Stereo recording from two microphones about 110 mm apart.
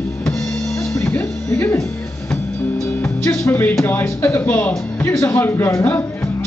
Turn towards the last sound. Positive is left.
turn(degrees=25)  # may be behind; listen again after turning